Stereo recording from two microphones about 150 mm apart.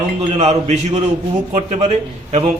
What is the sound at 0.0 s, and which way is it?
A man's voice, 50° right (ahead or behind).